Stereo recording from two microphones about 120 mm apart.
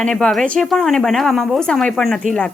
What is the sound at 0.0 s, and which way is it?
A woman's voice, 5° left (ahead or behind).